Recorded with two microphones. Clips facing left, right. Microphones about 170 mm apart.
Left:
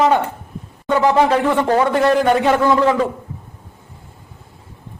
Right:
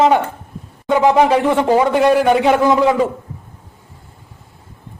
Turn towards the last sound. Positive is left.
turn(degrees=-15)  # may be behind; listen again after turning